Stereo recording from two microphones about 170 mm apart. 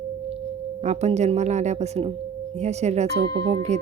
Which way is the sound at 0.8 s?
40° right (ahead or behind).